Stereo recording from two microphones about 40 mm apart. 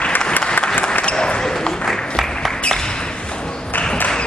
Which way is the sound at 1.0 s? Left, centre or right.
Left.